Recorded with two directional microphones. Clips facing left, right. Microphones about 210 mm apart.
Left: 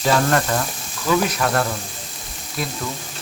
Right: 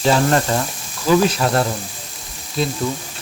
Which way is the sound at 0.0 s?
25° right (ahead or behind).